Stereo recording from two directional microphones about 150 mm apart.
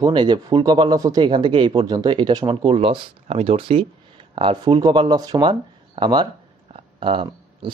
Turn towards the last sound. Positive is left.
turn(degrees=-35)  # may be behind; listen again after turning